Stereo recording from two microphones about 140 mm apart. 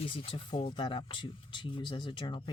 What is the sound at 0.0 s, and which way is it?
A woman's voice, 40° left (ahead or behind).